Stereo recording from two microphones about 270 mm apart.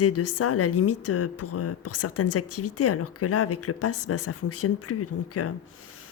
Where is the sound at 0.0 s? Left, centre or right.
Left.